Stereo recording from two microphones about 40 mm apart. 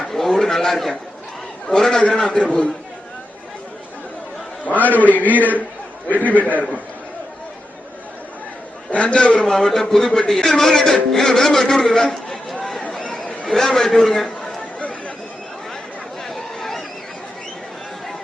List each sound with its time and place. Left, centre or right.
0.0 s a sound: centre
1.7 s speech: centre
4.6 s a man's voice: left
8.9 s a man's voice: left
9.6 s speech: centre
13.0 s chatter: left
13.5 s speech: centre
14.8 s chatter: left
16.2 s a sound: centre